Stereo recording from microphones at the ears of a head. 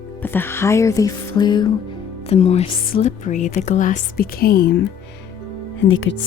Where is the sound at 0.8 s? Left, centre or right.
Left.